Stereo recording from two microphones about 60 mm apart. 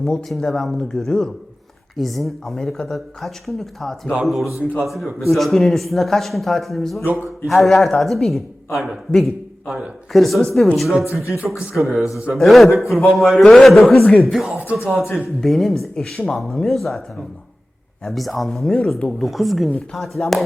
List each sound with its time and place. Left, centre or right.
0.0 s speech: centre
0.3 s a man's voice: centre
7.0 s speech: right
7.4 s a man's voice: centre
11.0 s speech: left
11.7 s a man's voice: centre
14.0 s speech: left
14.3 s a man's voice: centre
19.2 s a man's voice: centre